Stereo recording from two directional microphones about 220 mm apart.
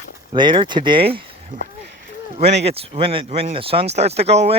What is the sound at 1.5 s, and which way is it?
Speech, 35° right (ahead or behind).